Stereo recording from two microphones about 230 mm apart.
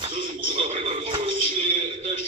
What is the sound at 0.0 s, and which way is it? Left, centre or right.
Bird, right.